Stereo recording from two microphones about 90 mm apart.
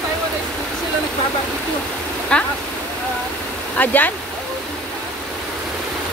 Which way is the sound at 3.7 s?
20° left (ahead or behind).